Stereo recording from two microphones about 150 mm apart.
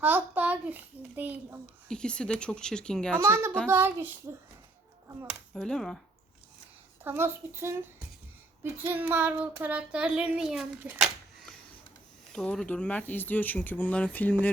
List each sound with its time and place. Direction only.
0.0 s a child's voice: 10° right (ahead or behind)
1.9 s a woman's voice: 5° left (ahead or behind)
3.2 s child singing: 15° right (ahead or behind)
5.5 s a woman's voice: 5° left (ahead or behind)
7.0 s child singing: 15° right (ahead or behind)
12.3 s speech: 5° left (ahead or behind)